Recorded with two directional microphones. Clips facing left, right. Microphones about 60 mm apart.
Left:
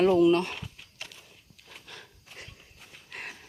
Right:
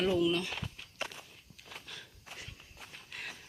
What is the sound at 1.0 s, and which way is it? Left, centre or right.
Walk, right.